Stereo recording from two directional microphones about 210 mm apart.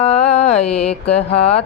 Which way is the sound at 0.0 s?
30° left (ahead or behind).